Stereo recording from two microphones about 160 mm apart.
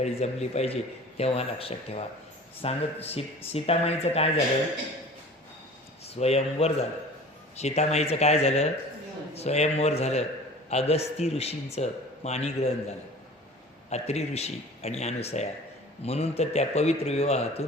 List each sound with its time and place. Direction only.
0.0 s a man's voice: 40° left (ahead or behind)
6.1 s a man's voice: 40° left (ahead or behind)